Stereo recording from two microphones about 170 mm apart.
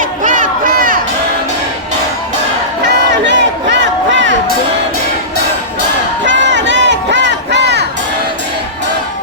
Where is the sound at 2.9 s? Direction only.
90° right.